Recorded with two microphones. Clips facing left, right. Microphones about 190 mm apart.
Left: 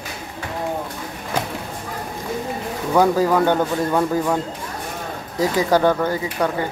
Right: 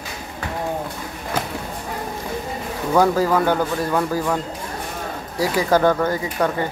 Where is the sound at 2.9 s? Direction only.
15° left (ahead or behind).